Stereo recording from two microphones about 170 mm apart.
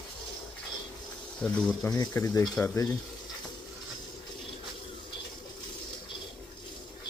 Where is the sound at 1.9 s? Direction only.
20° left (ahead or behind).